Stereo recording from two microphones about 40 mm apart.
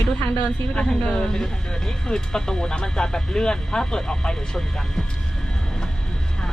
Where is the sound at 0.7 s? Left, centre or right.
Left.